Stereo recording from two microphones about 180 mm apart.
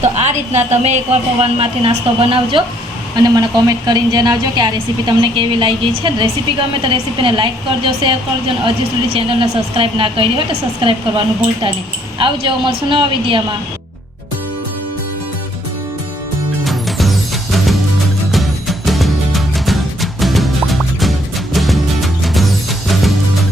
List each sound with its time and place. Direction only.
0.0 s a woman's voice: 40° right (ahead or behind)
16.6 s music: centre (ahead or behind)